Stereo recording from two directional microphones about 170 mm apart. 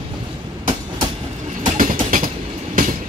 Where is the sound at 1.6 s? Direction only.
50° right (ahead or behind).